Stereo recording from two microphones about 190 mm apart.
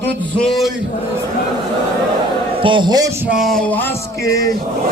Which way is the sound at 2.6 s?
25° right (ahead or behind).